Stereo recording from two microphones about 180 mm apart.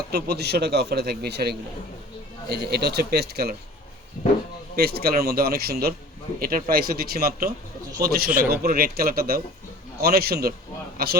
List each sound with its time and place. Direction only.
0.1 s a man's voice: 65° right (ahead or behind)
4.8 s a man's voice: 60° right (ahead or behind)